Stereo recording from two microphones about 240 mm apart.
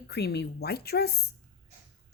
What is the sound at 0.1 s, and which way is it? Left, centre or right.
A woman's voice, left.